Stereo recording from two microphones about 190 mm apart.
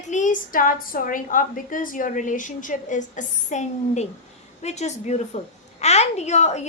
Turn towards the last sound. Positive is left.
turn(degrees=35)  # may be behind; listen again after turning